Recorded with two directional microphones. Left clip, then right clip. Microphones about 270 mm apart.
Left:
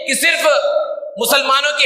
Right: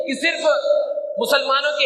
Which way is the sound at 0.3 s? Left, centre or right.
Left.